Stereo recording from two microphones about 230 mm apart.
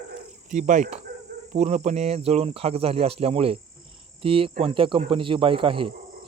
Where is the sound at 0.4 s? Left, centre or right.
Right.